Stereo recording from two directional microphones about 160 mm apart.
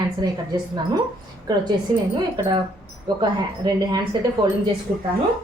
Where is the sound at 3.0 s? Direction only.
25° right (ahead or behind).